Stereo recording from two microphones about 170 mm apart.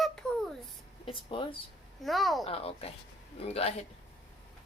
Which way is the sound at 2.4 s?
35° left (ahead or behind).